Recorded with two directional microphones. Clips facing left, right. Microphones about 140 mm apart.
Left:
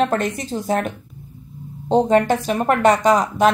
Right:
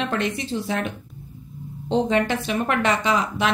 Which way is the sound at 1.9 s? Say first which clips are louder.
Left 5 dB; 45° left (ahead or behind).